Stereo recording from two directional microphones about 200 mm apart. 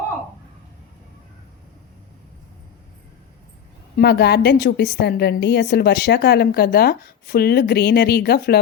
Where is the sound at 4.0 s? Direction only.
55° left (ahead or behind).